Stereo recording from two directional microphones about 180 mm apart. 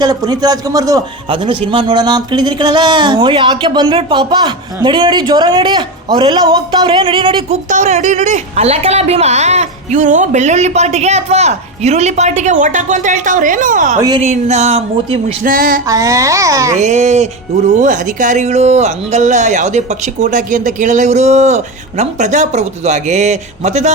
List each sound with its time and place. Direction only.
0.0 s a man's voice: 20° right (ahead or behind)
7.5 s a woman's voice: 40° right (ahead or behind)
15.5 s a sound: 50° right (ahead or behind)
15.9 s a child's voice: 20° right (ahead or behind)
16.7 s a woman's voice: 40° right (ahead or behind)